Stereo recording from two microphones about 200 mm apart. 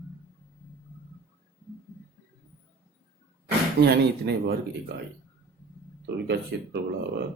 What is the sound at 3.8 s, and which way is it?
Speech, 55° right (ahead or behind).